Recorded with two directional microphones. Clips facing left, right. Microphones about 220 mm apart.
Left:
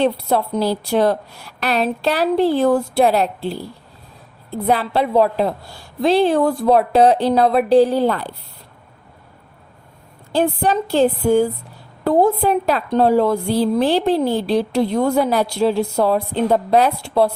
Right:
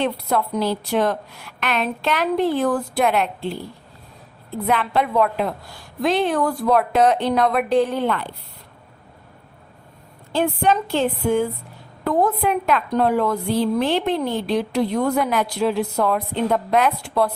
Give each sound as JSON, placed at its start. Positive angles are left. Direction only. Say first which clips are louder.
{"t": 0.0, "sound": "a woman's voice", "louder": "left 4 dB", "side_deg": 30}
{"t": 10.3, "sound": "a woman's voice", "louder": "left 2 dB", "side_deg": 35}